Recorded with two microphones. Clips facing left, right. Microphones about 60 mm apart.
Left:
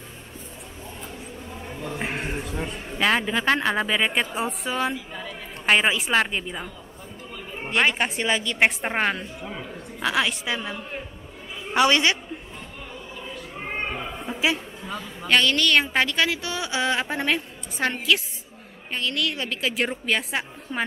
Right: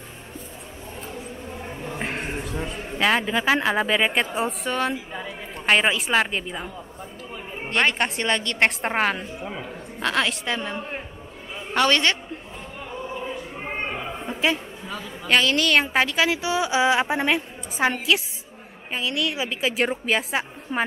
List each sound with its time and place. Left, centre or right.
2.0 s a man's voice: centre
4.9 s speech: centre
5.7 s a woman's voice: centre
10.0 s a woman's voice: centre
10.8 s a man's voice: centre
11.7 s a woman's voice: centre
13.1 s choir: right
13.6 s a man's voice: centre